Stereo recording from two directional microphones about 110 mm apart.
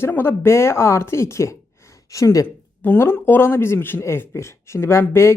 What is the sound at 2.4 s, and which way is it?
Speech, 15° left (ahead or behind).